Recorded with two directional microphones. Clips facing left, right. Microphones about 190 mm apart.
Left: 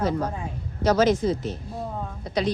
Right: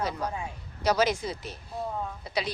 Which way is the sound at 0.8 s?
10° right (ahead or behind).